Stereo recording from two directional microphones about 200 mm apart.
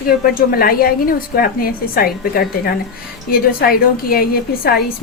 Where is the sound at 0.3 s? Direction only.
50° left (ahead or behind).